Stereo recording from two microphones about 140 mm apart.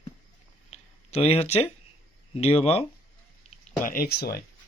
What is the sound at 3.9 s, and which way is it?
Speech, 90° left.